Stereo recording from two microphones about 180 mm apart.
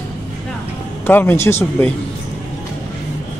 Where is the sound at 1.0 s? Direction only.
10° left (ahead or behind).